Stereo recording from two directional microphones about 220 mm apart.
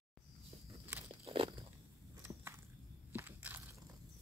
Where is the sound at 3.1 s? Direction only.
10° right (ahead or behind).